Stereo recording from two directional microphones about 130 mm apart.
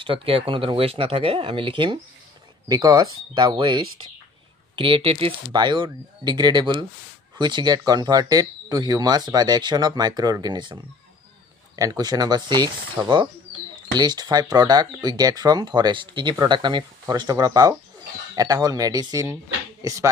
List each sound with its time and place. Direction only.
0.0 s speech: 45° right (ahead or behind)
2.7 s speech: 30° right (ahead or behind)